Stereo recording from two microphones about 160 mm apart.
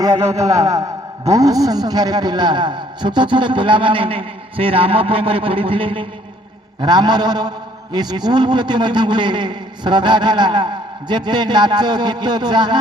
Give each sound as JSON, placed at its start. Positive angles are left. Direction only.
{"t": 0.2, "sound": "a man's voice", "side_deg": -45}
{"t": 1.3, "sound": "a man's voice", "side_deg": -20}